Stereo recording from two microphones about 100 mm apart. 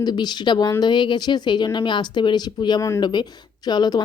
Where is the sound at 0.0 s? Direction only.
45° left (ahead or behind).